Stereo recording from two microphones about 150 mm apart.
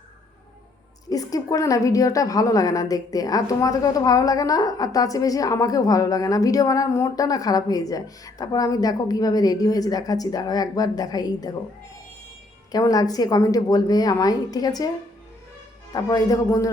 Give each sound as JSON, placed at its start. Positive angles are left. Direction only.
{"t": 1.1, "sound": "a woman's voice", "side_deg": 25}
{"t": 12.7, "sound": "a woman's voice", "side_deg": 25}
{"t": 15.9, "sound": "a woman's voice", "side_deg": 25}